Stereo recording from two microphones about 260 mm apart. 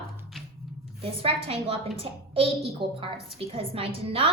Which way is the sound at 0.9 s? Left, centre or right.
Right.